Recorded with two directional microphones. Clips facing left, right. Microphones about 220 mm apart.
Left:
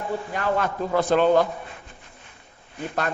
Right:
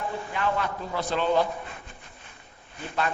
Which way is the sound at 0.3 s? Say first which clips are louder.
Left 3 dB; 45° left (ahead or behind).